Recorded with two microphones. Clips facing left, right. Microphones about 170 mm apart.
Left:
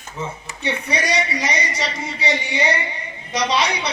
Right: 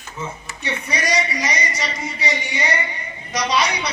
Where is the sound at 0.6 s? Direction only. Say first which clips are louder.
Left 2 dB; 30° left (ahead or behind).